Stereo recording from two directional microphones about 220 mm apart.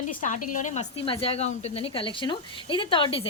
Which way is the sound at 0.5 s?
35° left (ahead or behind).